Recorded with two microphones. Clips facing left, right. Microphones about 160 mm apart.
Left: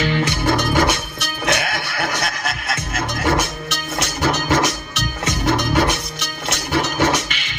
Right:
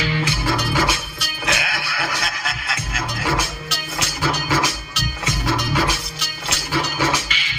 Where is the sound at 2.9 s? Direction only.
45° left (ahead or behind).